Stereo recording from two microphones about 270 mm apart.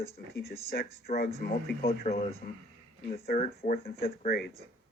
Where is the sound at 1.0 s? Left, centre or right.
Left.